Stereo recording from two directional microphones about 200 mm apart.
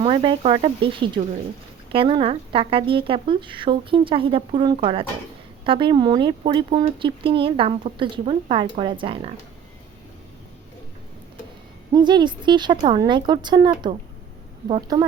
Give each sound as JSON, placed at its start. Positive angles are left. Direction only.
{"t": 0.0, "sound": "speech", "side_deg": -25}
{"t": 11.9, "sound": "speech", "side_deg": -20}